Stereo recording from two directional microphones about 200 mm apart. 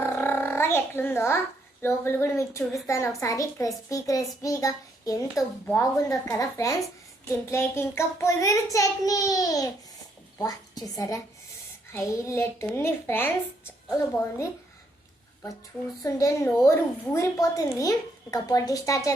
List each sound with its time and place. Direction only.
0.0 s a sound: 10° left (ahead or behind)
1.8 s a woman's voice: 10° left (ahead or behind)
16.0 s speech: 15° left (ahead or behind)